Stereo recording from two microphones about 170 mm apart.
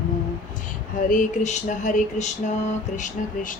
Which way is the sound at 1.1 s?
45° left (ahead or behind).